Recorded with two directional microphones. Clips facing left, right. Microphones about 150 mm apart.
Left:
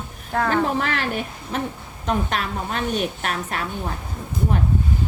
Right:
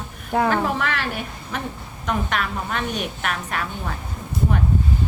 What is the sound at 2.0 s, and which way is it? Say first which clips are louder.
A woman's voice: left 1 dB; 35° left (ahead or behind).